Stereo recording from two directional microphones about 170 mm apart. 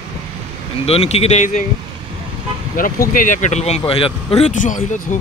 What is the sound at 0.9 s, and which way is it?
Speech, 40° left (ahead or behind).